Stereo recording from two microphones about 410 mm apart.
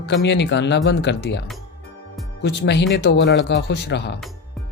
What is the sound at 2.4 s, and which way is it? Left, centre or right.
Speech, left.